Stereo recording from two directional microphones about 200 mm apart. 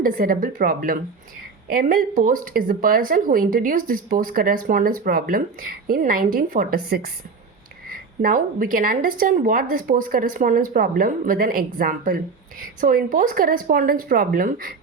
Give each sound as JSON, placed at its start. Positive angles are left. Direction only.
{"t": 0.0, "sound": "speech", "side_deg": -45}